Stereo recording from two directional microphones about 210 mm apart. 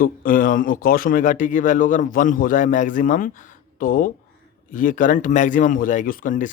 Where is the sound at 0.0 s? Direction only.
40° left (ahead or behind).